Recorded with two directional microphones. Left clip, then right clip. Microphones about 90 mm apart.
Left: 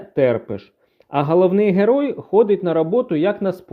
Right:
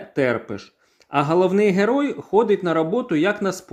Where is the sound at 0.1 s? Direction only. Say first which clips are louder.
Left 4 dB; 45° left (ahead or behind).